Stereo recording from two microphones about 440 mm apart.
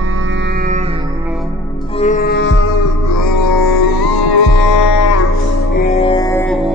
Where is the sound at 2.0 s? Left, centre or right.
Centre.